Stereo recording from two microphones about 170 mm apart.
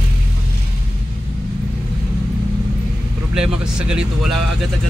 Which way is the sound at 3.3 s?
5° right (ahead or behind).